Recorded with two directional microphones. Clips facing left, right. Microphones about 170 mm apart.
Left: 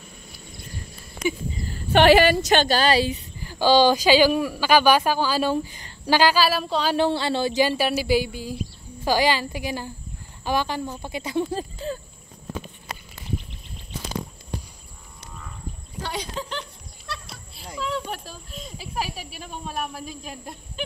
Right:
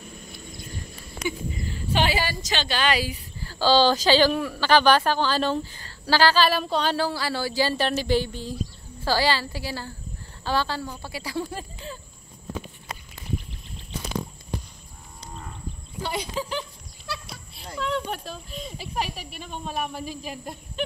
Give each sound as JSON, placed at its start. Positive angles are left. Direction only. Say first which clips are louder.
{"t": 1.9, "sound": "a woman's voice", "louder": "left 10 dB", "side_deg": 65}
{"t": 7.0, "sound": "a woman's voice", "louder": "left 5 dB", "side_deg": 25}
{"t": 12.9, "sound": "a sound", "louder": "left 1 dB", "side_deg": 75}
{"t": 16.0, "sound": "speech", "louder": "right 2 dB", "side_deg": -5}